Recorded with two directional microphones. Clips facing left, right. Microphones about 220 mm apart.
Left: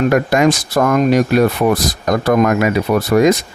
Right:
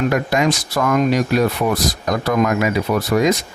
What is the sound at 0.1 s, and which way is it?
Speech, 50° left (ahead or behind).